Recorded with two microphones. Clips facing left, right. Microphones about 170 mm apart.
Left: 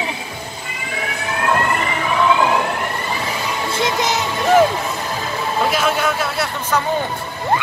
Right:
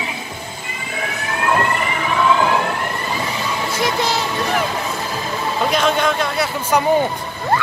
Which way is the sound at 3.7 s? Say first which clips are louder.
Left 1 dB; 20° left (ahead or behind).